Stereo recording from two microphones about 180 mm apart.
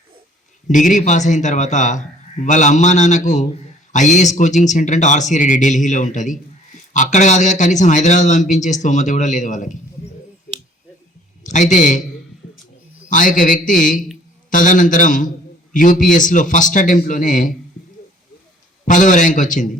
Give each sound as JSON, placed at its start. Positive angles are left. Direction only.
{"t": 0.7, "sound": "a man's voice", "side_deg": 45}
{"t": 11.4, "sound": "a man's voice", "side_deg": 40}
{"t": 13.1, "sound": "a man's voice", "side_deg": 45}
{"t": 18.9, "sound": "a man's voice", "side_deg": 45}